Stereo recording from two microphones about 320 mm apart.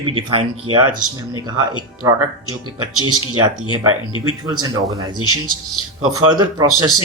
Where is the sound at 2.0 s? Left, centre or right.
Centre.